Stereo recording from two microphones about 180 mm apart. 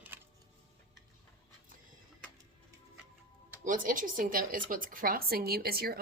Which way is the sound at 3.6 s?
45° right (ahead or behind).